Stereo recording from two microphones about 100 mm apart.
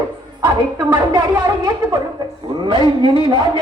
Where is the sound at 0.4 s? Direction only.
45° right (ahead or behind).